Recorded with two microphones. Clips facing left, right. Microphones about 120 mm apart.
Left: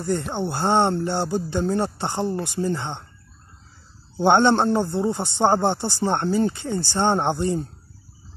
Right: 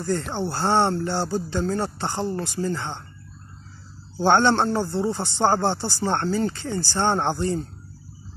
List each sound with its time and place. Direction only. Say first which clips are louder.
0.0 s speech: left 1 dB; 20° left (ahead or behind)
4.2 s speech: left 2 dB; 20° left (ahead or behind)